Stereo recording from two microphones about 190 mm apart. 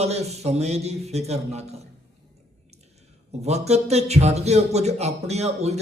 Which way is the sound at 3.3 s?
35° right (ahead or behind).